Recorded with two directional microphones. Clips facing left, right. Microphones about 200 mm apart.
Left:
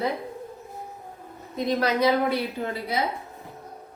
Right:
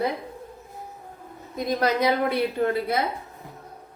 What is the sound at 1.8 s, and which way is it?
A woman's voice, 55° right (ahead or behind).